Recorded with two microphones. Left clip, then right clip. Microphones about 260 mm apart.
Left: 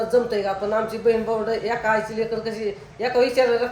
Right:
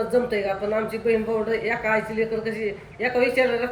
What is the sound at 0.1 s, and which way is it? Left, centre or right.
Speech, centre.